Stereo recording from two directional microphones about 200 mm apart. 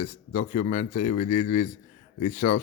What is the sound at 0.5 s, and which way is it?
Speech, 35° left (ahead or behind).